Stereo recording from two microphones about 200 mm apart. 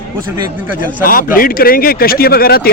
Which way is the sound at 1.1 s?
45° left (ahead or behind).